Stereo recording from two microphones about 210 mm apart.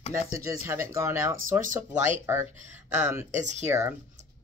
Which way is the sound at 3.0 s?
10° right (ahead or behind).